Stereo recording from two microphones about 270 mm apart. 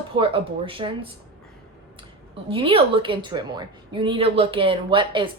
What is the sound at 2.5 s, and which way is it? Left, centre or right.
A woman's voice, centre.